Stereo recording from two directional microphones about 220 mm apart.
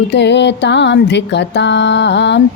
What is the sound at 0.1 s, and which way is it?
Music, 50° left (ahead or behind).